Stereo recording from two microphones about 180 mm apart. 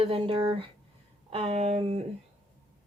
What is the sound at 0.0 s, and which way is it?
A woman's voice, 30° right (ahead or behind).